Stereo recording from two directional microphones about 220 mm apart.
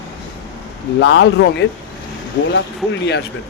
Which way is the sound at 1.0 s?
50° left (ahead or behind).